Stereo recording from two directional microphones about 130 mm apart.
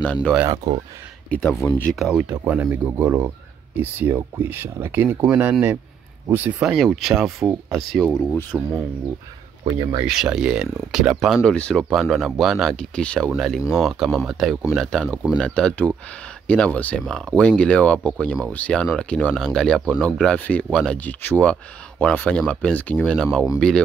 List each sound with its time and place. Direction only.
0.0 s speech: 10° left (ahead or behind)
0.7 s speech: 35° right (ahead or behind)
1.3 s speech: 10° left (ahead or behind)
2.0 s speech: 5° right (ahead or behind)
6.6 s speech: 5° right (ahead or behind)
8.2 s speech: 15° left (ahead or behind)
10.0 s speech: 5° right (ahead or behind)